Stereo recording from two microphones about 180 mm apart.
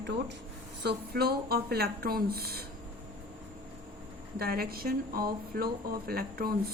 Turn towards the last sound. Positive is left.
turn(degrees=-55)  # may be behind; listen again after turning